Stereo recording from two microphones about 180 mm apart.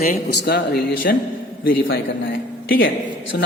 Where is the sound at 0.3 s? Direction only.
60° left (ahead or behind).